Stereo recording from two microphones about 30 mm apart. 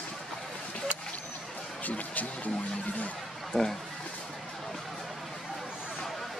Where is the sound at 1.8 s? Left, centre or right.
Left.